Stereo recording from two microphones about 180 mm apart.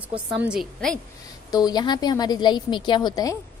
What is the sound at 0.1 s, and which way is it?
Speech, 5° right (ahead or behind).